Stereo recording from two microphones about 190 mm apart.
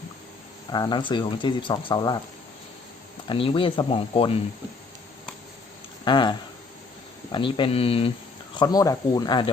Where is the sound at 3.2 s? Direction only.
25° left (ahead or behind).